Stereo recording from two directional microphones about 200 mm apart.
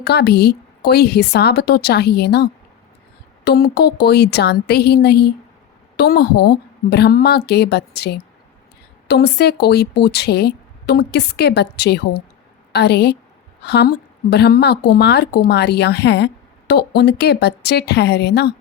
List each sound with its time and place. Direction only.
0.0 s a woman's voice: 55° left (ahead or behind)